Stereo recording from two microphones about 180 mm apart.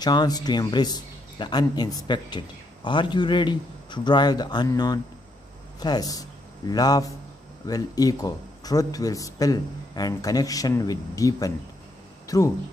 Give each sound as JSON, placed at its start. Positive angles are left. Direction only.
{"t": 0.0, "sound": "a man's voice", "side_deg": 20}